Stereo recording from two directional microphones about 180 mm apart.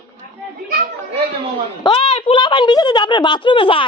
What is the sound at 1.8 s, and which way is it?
Speech, 30° left (ahead or behind).